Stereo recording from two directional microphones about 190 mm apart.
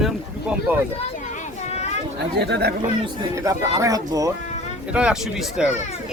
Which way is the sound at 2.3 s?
60° right (ahead or behind).